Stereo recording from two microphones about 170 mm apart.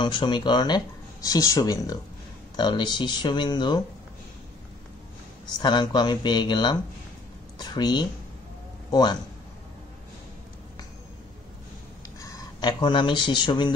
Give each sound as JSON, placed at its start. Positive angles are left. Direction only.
{"t": 0.0, "sound": "speech", "side_deg": 25}
{"t": 5.6, "sound": "speech", "side_deg": 25}
{"t": 12.2, "sound": "speech", "side_deg": 20}